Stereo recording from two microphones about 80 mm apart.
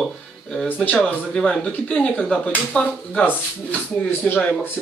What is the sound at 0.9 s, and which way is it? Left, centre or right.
A man's voice, centre.